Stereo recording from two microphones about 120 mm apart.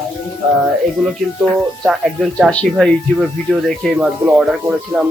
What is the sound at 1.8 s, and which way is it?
Speech, centre (ahead or behind).